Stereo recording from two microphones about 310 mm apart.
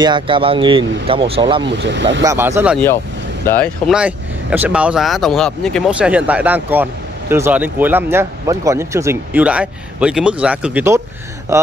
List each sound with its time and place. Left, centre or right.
0.0 s speech: centre
1.6 s speech: right
2.2 s speech: centre
3.4 s speech: centre